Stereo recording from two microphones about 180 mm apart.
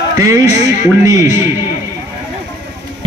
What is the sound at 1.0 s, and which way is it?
Speech, 15° right (ahead or behind).